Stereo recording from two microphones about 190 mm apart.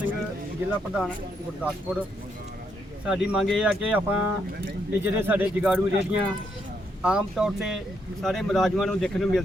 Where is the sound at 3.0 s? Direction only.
5° right (ahead or behind).